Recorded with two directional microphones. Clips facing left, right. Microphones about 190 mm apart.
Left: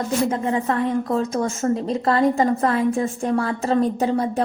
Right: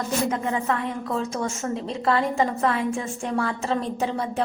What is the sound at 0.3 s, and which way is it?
A woman's voice, 35° left (ahead or behind).